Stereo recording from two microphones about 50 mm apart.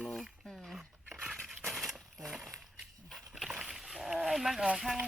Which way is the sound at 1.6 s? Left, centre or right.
Centre.